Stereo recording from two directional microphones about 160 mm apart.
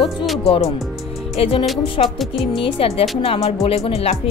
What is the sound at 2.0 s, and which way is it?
Speech, 45° left (ahead or behind).